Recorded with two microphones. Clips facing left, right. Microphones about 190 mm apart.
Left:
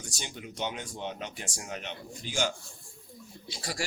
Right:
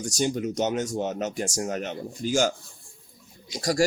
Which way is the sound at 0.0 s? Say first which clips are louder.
Right 15 dB; 45° right (ahead or behind).